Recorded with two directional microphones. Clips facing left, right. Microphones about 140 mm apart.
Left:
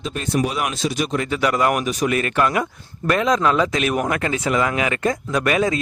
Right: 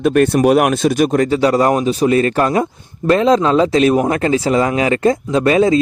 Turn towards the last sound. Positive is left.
turn(degrees=-30)  # may be behind; listen again after turning